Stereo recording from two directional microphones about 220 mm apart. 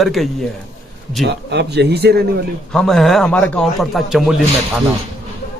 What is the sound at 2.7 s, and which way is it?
Speech, centre (ahead or behind).